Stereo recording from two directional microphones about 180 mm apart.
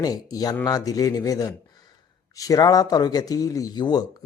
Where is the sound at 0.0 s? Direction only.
20° left (ahead or behind).